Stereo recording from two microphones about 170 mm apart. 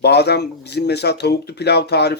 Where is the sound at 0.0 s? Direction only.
75° left (ahead or behind).